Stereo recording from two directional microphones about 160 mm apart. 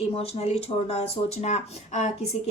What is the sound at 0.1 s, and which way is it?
Speech, 40° left (ahead or behind).